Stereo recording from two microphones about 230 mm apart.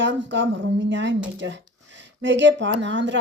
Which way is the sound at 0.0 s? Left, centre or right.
Right.